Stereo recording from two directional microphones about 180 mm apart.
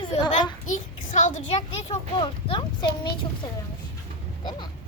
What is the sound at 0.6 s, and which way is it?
Speech, 45° left (ahead or behind).